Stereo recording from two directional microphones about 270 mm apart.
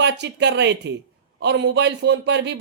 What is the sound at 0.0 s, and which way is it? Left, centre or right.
Speech, right.